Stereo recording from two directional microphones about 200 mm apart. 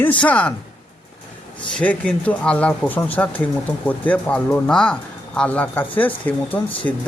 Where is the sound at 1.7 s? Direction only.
5° left (ahead or behind).